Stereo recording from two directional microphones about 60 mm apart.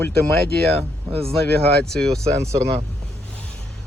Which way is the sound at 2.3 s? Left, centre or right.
Right.